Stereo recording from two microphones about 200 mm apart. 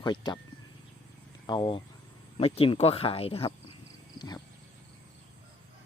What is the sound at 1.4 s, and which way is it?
Speech, 25° left (ahead or behind).